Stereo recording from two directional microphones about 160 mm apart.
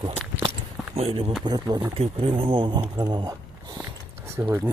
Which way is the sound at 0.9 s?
40° right (ahead or behind).